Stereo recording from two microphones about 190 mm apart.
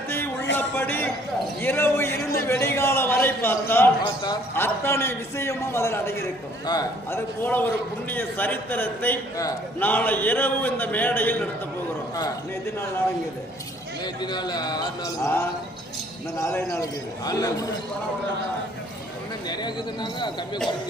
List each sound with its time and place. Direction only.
0.5 s a sound: 10° left (ahead or behind)
1.6 s a man's voice: 10° left (ahead or behind)
7.4 s a man's voice: 10° left (ahead or behind)
14.0 s a man's voice: 20° left (ahead or behind)
19.5 s speech: 25° left (ahead or behind)